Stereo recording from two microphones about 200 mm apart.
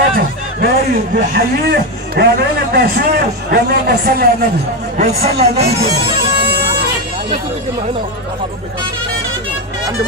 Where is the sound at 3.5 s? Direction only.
50° right (ahead or behind).